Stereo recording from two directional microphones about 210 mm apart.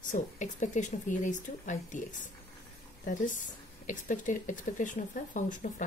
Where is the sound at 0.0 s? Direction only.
35° left (ahead or behind).